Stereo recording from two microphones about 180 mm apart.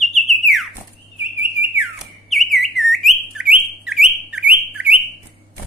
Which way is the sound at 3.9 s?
5° right (ahead or behind).